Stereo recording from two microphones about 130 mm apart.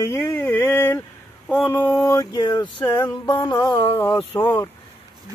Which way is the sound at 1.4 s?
15° left (ahead or behind).